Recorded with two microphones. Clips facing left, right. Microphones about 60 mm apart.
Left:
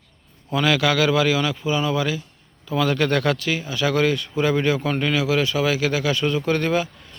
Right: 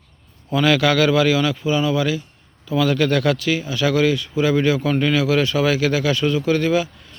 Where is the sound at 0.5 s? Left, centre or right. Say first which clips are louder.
Right 3 dB; centre.